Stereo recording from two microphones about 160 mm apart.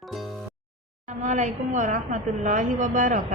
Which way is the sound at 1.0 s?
50° right (ahead or behind).